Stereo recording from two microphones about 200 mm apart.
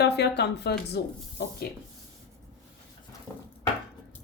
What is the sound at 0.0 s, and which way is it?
Speech, 60° left (ahead or behind).